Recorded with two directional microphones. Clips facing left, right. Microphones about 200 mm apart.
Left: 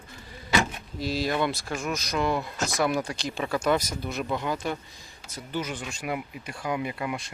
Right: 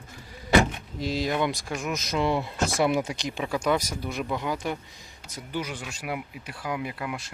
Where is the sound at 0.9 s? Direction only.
20° right (ahead or behind).